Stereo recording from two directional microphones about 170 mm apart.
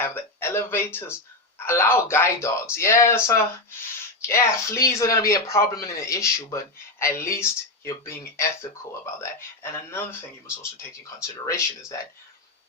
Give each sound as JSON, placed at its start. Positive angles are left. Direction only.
{"t": 0.0, "sound": "a sound", "side_deg": 15}
{"t": 1.5, "sound": "speech", "side_deg": 15}
{"t": 9.9, "sound": "speech", "side_deg": 15}